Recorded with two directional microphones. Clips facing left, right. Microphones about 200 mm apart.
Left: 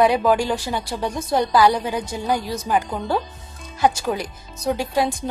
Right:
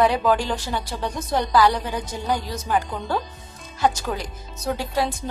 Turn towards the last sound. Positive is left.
turn(degrees=15)  # may be behind; listen again after turning